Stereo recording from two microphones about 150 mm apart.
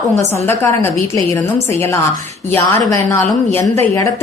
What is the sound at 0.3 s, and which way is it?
A woman's voice, 15° left (ahead or behind).